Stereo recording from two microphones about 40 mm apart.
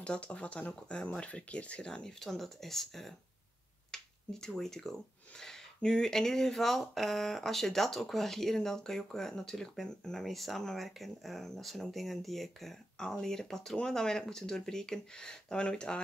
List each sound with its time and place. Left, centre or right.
0.0 s speech: left
2.1 s speech: centre
3.9 s a sound: centre
4.5 s speech: centre
10.2 s speech: centre
12.9 s speech: centre